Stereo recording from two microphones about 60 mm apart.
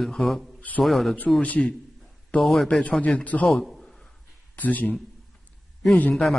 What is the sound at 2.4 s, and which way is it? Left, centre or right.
Speech, centre.